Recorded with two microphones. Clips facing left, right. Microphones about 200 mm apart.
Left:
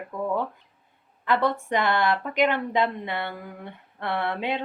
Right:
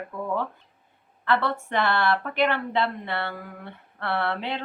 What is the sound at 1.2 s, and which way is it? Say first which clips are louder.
Speech: left 1 dB; 15° left (ahead or behind).